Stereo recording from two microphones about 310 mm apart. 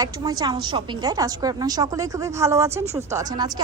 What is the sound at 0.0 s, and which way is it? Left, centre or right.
A woman's voice, centre.